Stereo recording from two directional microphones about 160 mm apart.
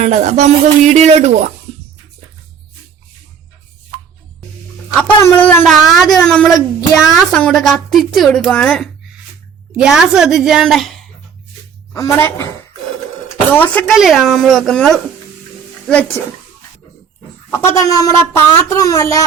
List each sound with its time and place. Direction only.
0.0 s speech: 45° right (ahead or behind)
5.2 s a woman's voice: 10° left (ahead or behind)
9.7 s a woman's voice: 5° right (ahead or behind)
11.9 s speech: 15° left (ahead or behind)
13.5 s speech: 10° left (ahead or behind)
13.9 s a woman's voice: centre (ahead or behind)
17.5 s speech: 15° left (ahead or behind)